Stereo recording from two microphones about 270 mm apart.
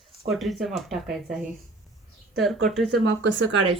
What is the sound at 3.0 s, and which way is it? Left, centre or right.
Speech, right.